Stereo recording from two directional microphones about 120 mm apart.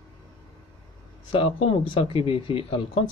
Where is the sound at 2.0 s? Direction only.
50° left (ahead or behind).